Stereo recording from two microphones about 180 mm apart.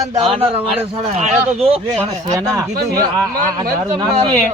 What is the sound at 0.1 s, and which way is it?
A man's voice, 30° right (ahead or behind).